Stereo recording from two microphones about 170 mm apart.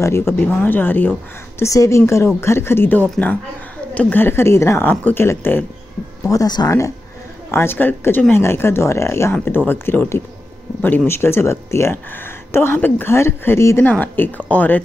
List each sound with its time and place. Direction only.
0.0 s speech: 15° left (ahead or behind)